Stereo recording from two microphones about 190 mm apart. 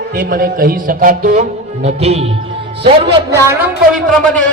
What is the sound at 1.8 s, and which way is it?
Speech, 35° right (ahead or behind).